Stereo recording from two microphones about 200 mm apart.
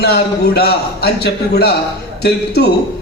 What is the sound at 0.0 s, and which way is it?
A man's voice, 55° left (ahead or behind).